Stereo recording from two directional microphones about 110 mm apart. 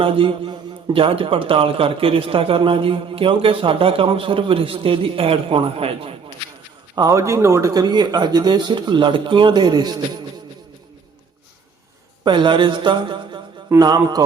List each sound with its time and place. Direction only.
0.0 s a man's voice: 55° right (ahead or behind)
6.9 s speech: 30° right (ahead or behind)
12.2 s a woman's voice: 45° right (ahead or behind)